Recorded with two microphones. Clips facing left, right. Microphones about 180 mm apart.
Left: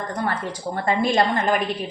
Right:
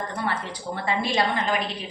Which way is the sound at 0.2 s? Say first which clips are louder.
Left 5 dB; 45° left (ahead or behind).